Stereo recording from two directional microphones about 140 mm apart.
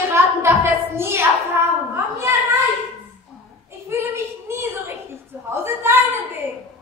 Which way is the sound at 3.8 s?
20° right (ahead or behind).